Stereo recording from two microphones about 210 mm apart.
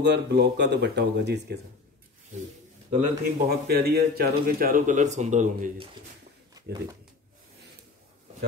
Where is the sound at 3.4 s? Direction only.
50° right (ahead or behind).